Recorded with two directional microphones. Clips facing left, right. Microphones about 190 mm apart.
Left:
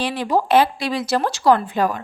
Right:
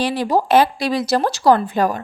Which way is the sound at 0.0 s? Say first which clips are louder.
Right 2 dB; 40° right (ahead or behind).